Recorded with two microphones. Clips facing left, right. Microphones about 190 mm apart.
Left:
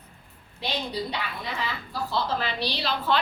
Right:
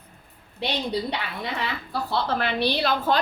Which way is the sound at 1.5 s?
65° right (ahead or behind).